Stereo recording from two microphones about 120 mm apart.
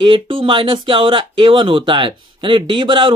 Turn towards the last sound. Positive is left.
turn(degrees=-40)  # may be behind; listen again after turning